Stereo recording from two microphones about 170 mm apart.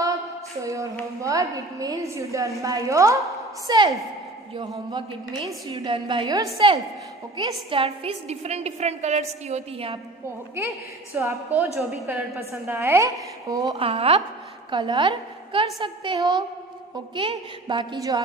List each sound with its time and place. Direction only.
0.0 s a sound: 20° right (ahead or behind)
1.2 s a woman's voice: 20° right (ahead or behind)
5.7 s a woman's voice: 30° right (ahead or behind)
11.1 s a woman's voice: 15° right (ahead or behind)
13.7 s a woman's voice: 35° right (ahead or behind)